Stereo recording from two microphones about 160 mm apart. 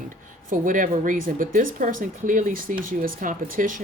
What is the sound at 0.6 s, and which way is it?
Speech, 55° right (ahead or behind).